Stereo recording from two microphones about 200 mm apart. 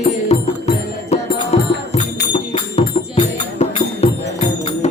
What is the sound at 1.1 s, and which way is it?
Music, 30° left (ahead or behind).